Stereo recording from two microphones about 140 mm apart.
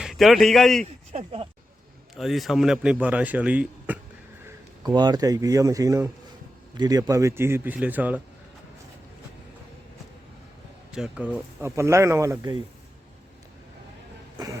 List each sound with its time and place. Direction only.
0.0 s speech: centre (ahead or behind)
0.9 s speech: 45° right (ahead or behind)
2.1 s speech: centre (ahead or behind)
4.8 s speech: 30° right (ahead or behind); by 8.2 s 10° right (ahead or behind)
10.9 s speech: 5° right (ahead or behind)
11.6 s speech: 20° right (ahead or behind)